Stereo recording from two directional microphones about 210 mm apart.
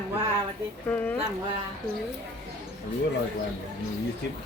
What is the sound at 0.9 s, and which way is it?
Speech, 10° left (ahead or behind).